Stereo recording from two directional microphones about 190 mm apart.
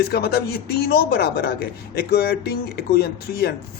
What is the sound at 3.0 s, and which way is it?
Speech, 55° left (ahead or behind).